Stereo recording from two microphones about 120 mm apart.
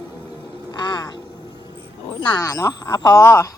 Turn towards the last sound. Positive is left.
turn(degrees=20)  # may be behind; listen again after turning